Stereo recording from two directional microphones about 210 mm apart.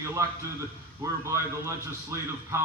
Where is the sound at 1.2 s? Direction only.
15° right (ahead or behind).